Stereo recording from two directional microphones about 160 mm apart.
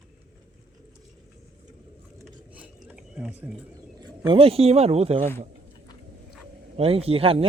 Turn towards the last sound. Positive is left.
turn(degrees=-35)  # may be behind; listen again after turning